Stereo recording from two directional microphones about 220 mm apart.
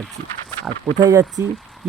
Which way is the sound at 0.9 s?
20° right (ahead or behind).